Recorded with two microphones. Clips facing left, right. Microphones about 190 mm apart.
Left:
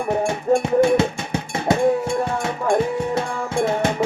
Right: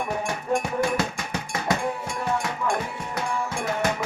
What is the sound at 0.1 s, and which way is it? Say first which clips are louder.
Music: left 10 dB; 25° left (ahead or behind).